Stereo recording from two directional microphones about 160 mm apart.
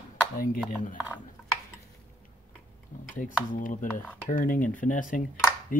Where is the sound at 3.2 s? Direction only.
60° left (ahead or behind).